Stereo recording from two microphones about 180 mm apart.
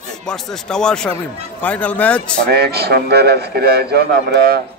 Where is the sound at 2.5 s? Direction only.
60° right (ahead or behind).